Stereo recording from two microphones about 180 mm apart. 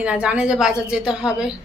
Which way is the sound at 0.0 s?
5° right (ahead or behind).